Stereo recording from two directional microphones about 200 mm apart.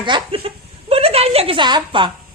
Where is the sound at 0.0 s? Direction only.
25° right (ahead or behind).